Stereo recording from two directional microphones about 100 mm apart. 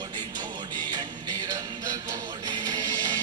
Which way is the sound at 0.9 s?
45° right (ahead or behind).